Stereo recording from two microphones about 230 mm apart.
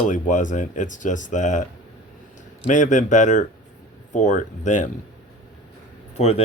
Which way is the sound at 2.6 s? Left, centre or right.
Left.